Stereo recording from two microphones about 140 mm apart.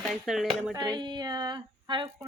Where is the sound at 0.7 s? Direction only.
30° right (ahead or behind).